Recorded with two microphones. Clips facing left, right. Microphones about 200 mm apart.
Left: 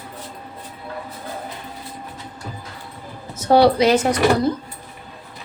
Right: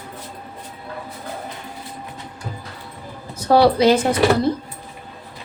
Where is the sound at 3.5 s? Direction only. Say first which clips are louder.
Even; 30° right (ahead or behind).